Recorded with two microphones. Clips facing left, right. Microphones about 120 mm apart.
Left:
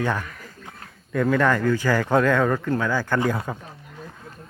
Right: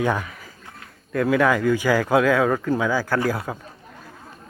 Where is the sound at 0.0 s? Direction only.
10° right (ahead or behind).